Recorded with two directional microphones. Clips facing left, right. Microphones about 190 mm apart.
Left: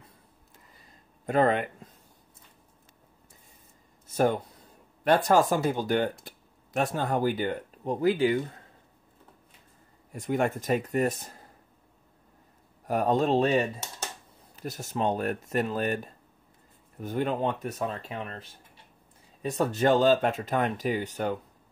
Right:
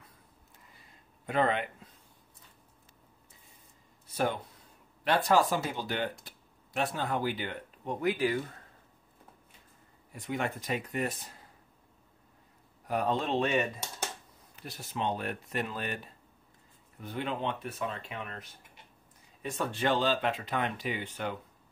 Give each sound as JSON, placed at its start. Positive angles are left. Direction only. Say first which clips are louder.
{"t": 1.2, "sound": "speech", "louder": "left 5 dB", "side_deg": 45}
{"t": 4.1, "sound": "speech", "louder": "left 6 dB", "side_deg": 45}
{"t": 10.1, "sound": "speech", "louder": "left 7 dB", "side_deg": 45}
{"t": 12.8, "sound": "speech", "louder": "left 6 dB", "side_deg": 45}